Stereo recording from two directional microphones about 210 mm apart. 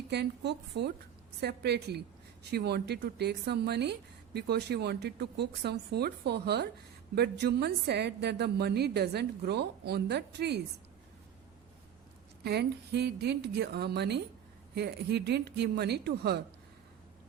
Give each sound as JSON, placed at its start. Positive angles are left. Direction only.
{"t": 0.1, "sound": "a woman's voice", "side_deg": -55}
{"t": 12.4, "sound": "a woman's voice", "side_deg": -50}